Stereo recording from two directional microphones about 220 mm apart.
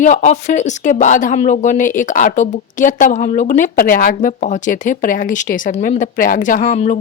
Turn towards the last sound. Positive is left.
turn(degrees=35)  # may be behind; listen again after turning